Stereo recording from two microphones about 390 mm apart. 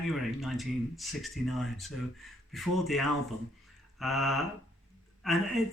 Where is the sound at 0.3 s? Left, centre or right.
Centre.